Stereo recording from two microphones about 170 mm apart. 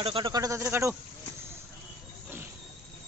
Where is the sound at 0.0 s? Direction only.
30° right (ahead or behind).